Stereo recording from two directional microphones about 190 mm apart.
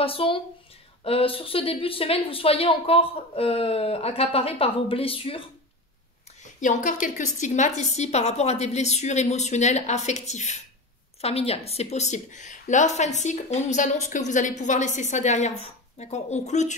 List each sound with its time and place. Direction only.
0.0 s a woman's voice: 30° left (ahead or behind)
6.4 s a woman's voice: 40° left (ahead or behind)